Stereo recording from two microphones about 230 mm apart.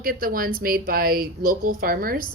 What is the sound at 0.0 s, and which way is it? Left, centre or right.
A woman's voice, right.